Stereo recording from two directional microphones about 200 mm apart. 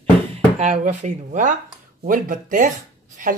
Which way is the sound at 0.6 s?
35° right (ahead or behind).